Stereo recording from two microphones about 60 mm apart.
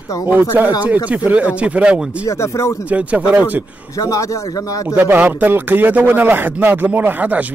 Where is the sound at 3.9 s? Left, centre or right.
Left.